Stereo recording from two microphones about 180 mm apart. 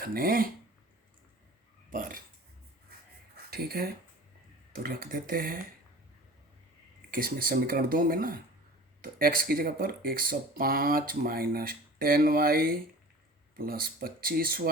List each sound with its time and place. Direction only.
0.0 s speech: 55° right (ahead or behind)
1.9 s a sound: 50° right (ahead or behind)
3.5 s speech: 55° right (ahead or behind)
7.1 s speech: 55° right (ahead or behind)